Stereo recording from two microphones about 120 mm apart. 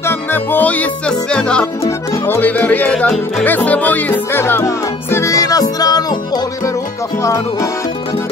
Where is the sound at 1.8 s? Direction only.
20° left (ahead or behind).